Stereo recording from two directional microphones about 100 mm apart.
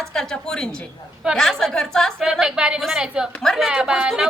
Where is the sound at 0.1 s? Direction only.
5° left (ahead or behind).